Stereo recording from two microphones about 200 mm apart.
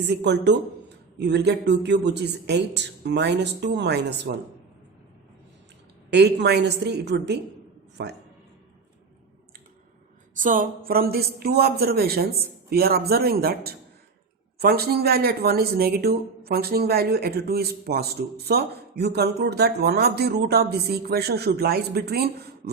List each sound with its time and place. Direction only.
0.1 s a man's voice: 60° right (ahead or behind)
6.1 s a man's voice: 60° right (ahead or behind)
10.3 s speech: 40° right (ahead or behind)